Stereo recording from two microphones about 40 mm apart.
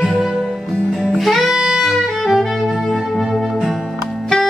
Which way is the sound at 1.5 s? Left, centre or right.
Centre.